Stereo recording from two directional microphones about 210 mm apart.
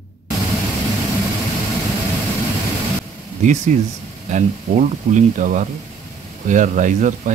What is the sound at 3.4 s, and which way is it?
Speech, 35° right (ahead or behind).